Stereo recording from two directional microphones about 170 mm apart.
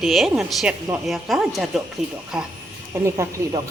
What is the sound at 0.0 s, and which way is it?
Speech, centre (ahead or behind).